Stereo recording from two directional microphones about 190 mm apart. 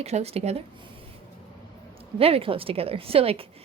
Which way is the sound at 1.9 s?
30° right (ahead or behind).